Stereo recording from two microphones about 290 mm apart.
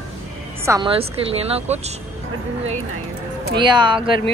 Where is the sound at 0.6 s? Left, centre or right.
Centre.